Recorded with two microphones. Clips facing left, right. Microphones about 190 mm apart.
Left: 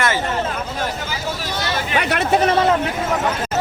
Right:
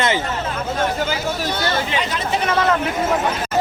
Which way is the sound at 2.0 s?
65° left (ahead or behind).